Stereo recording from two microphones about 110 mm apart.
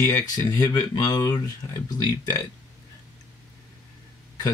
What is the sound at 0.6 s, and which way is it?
Speech, 35° left (ahead or behind).